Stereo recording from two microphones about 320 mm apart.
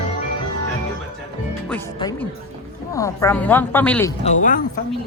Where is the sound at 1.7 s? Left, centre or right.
Centre.